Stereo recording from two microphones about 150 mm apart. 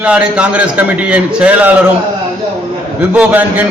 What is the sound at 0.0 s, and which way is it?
A man's voice, 10° right (ahead or behind).